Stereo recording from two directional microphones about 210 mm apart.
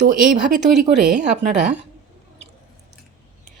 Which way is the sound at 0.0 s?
45° right (ahead or behind).